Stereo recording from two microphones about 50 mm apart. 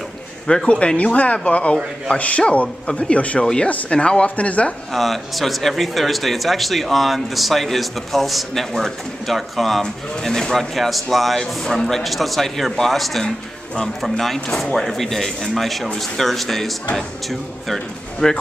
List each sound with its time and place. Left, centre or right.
0.7 s speech: left
4.9 s speech: centre
18.2 s speech: centre